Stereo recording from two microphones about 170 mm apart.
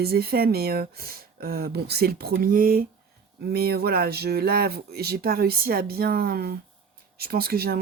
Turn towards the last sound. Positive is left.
turn(degrees=-65)  # may be behind; listen again after turning